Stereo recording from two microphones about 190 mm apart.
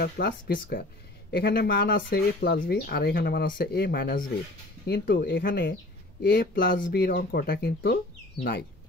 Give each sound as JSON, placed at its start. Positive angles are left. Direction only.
{"t": 0.0, "sound": "speech", "side_deg": 50}